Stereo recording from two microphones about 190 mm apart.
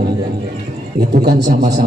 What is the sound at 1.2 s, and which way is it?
Speech, 60° right (ahead or behind).